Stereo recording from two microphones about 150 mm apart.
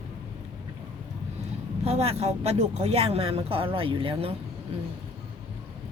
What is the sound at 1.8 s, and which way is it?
Speech, 45° right (ahead or behind).